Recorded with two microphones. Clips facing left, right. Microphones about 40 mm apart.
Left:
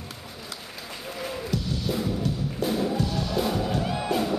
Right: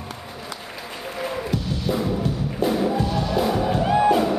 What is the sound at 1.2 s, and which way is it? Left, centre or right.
Music, centre.